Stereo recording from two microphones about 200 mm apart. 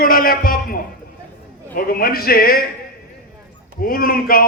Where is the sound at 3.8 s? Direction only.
45° left (ahead or behind).